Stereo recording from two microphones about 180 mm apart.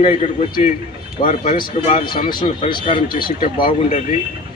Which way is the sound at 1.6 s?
25° left (ahead or behind).